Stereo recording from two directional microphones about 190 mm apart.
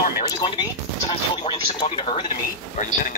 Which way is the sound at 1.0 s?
25° left (ahead or behind).